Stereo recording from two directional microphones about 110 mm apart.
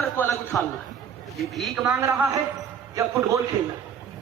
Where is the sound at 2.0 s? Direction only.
25° right (ahead or behind).